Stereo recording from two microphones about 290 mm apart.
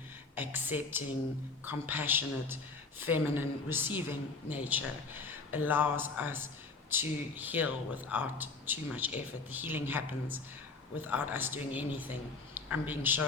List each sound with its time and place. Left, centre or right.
0.3 s a woman's voice: centre
11.0 s speech: centre